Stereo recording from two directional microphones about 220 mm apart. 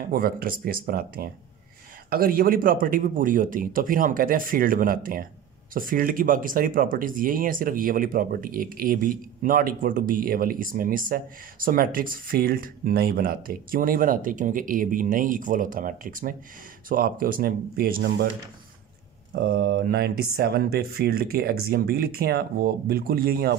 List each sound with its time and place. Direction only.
0.1 s speech: 40° right (ahead or behind)
19.3 s speech: 50° right (ahead or behind)